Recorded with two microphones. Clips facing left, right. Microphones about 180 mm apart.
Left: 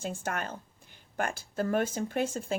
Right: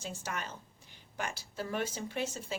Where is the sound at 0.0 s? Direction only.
55° left (ahead or behind).